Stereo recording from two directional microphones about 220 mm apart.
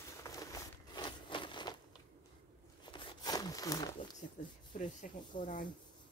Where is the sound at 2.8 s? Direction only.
20° left (ahead or behind).